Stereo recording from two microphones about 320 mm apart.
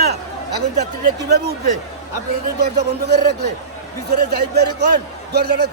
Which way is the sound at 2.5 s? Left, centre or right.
Right.